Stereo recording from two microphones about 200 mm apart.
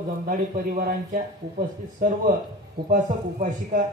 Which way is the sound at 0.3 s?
45° right (ahead or behind).